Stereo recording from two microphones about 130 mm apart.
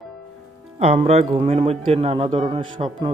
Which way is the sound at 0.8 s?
55° right (ahead or behind).